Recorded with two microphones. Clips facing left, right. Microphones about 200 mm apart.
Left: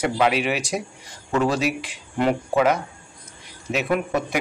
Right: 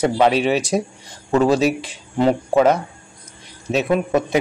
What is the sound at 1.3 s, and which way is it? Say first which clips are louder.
Speech: right 6 dB; 30° right (ahead or behind).